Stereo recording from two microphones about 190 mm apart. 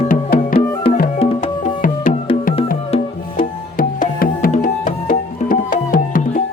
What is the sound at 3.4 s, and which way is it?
Music, 45° left (ahead or behind).